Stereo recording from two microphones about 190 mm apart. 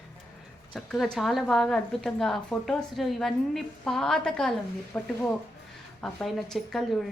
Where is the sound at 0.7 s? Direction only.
Centre (ahead or behind).